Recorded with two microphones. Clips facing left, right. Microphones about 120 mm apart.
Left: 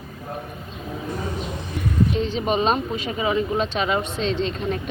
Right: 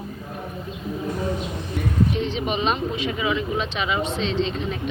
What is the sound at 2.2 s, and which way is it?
Speech, 40° left (ahead or behind).